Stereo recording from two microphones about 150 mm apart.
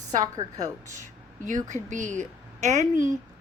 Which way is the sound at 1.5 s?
55° right (ahead or behind).